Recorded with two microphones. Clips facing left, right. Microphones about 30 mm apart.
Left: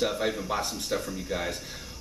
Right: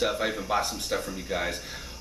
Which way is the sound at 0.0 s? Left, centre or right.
Centre.